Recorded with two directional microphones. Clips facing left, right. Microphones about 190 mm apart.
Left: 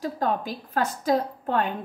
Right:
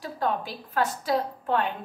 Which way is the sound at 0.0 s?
45° left (ahead or behind).